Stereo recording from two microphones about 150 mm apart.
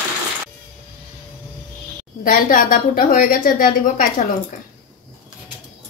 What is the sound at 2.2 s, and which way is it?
A woman's voice, 65° left (ahead or behind).